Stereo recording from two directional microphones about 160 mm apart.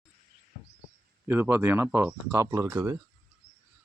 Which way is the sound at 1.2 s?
15° right (ahead or behind).